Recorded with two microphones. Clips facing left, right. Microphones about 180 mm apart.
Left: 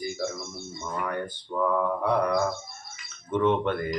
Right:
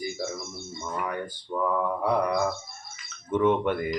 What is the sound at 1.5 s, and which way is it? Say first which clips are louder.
Mantra: left 1 dB; 10° right (ahead or behind).